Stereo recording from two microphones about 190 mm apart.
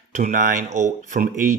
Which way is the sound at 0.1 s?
40° right (ahead or behind).